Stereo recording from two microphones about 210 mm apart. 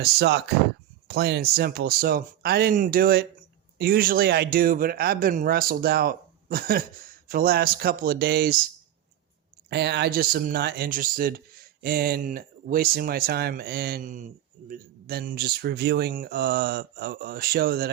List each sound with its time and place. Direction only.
0.0 s speech: 50° right (ahead or behind)
9.6 s speech: 55° right (ahead or behind)